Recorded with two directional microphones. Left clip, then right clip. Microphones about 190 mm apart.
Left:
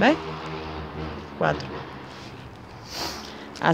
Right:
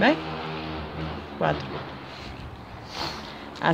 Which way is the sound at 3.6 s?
20° left (ahead or behind).